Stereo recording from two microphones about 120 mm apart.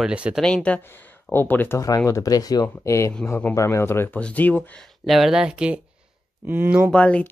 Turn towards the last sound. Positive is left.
turn(degrees=10)  # may be behind; listen again after turning